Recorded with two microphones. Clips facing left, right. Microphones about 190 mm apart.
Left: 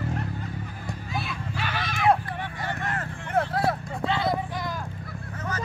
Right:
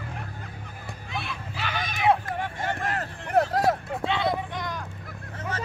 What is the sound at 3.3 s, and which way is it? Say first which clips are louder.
Vehicle: right 3 dB; 40° right (ahead or behind).